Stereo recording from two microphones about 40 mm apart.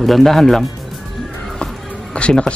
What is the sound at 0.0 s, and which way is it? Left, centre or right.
Speech, centre.